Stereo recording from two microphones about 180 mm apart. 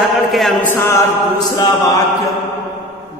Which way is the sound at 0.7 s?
10° left (ahead or behind).